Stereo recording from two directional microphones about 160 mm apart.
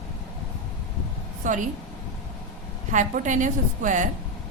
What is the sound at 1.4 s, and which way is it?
Speech, 55° right (ahead or behind).